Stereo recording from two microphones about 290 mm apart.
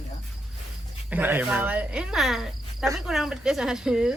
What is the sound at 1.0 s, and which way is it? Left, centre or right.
Speech, centre.